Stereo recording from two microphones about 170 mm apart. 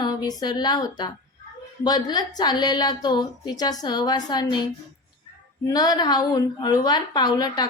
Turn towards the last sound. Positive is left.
turn(degrees=25)  # may be behind; listen again after turning